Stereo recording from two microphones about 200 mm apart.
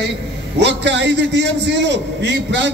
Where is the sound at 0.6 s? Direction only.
60° right (ahead or behind).